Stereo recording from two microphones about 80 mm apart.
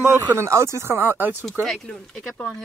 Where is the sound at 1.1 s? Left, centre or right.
Right.